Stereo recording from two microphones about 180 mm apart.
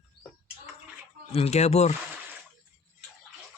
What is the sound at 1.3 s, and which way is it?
Speech, 35° left (ahead or behind).